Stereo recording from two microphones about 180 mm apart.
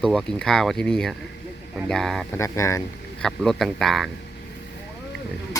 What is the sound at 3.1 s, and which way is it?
Speech, 5° left (ahead or behind).